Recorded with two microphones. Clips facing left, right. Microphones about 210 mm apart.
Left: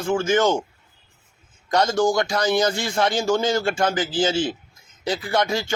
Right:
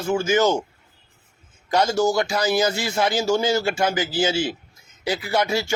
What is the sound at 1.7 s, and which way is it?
A man's voice, 10° right (ahead or behind).